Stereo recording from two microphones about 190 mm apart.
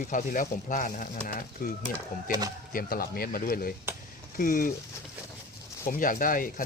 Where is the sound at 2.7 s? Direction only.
50° left (ahead or behind).